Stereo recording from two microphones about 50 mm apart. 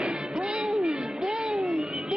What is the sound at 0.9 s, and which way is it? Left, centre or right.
Music, centre.